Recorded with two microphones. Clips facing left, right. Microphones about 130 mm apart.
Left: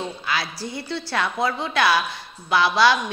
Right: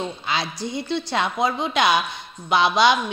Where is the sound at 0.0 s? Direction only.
20° right (ahead or behind).